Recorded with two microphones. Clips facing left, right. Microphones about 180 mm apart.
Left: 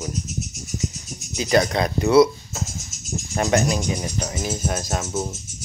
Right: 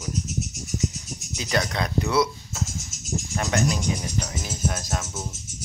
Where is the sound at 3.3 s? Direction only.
30° left (ahead or behind).